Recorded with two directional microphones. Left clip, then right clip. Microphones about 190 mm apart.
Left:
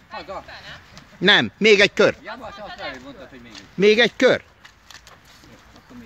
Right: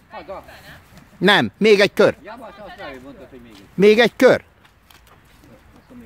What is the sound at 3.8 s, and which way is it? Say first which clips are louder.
Speech: right 3 dB; 25° right (ahead or behind).